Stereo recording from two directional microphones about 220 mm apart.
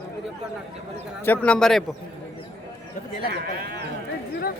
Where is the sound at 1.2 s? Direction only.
5° left (ahead or behind).